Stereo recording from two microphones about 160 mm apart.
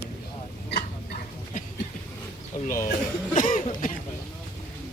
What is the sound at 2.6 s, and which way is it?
Speech, 60° left (ahead or behind).